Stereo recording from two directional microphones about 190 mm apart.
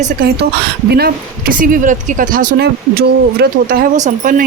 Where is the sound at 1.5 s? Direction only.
45° right (ahead or behind).